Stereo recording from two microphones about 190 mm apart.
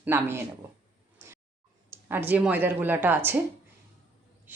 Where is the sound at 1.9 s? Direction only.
10° right (ahead or behind).